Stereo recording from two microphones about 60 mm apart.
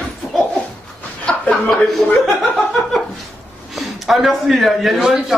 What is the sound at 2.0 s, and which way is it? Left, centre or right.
Speech, centre.